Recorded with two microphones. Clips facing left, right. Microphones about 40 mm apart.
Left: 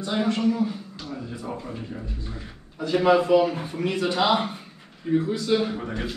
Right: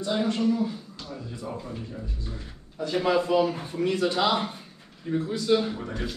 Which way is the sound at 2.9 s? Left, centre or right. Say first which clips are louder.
Left 5 dB; centre.